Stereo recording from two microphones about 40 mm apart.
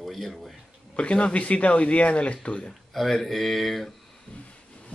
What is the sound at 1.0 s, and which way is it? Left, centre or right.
Speech, left.